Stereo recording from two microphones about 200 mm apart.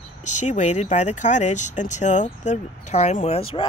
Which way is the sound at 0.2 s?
35° left (ahead or behind).